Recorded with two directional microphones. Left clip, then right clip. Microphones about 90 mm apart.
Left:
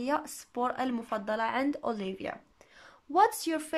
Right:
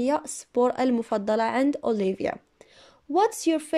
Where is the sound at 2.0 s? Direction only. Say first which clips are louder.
Right 10 dB; 65° right (ahead or behind).